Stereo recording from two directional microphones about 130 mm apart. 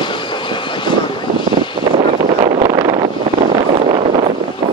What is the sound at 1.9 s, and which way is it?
Vehicle, 55° right (ahead or behind).